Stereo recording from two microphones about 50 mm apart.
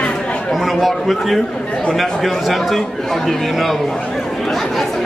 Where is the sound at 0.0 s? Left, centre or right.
Left.